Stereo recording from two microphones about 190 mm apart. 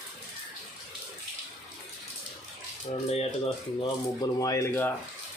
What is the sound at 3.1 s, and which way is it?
Speech, 35° left (ahead or behind).